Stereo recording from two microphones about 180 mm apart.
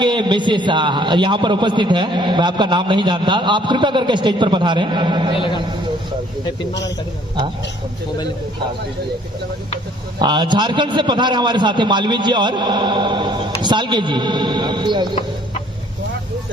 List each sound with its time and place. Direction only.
0.0 s a man's voice: 25° right (ahead or behind)
10.2 s a man's voice: 25° right (ahead or behind)